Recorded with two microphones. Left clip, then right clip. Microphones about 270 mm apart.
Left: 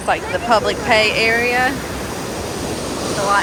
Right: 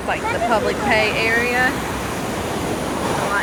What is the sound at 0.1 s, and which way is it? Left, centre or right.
Speech, centre.